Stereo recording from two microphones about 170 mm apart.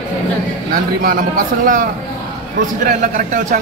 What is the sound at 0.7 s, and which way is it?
A man's voice, 60° right (ahead or behind).